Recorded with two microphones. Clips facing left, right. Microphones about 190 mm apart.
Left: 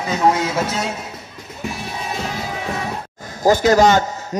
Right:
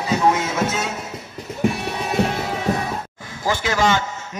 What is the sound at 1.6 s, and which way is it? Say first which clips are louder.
Music: right 5 dB; 60° right (ahead or behind).